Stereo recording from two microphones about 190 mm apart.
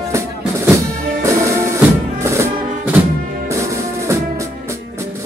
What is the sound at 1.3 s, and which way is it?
Music, 15° right (ahead or behind).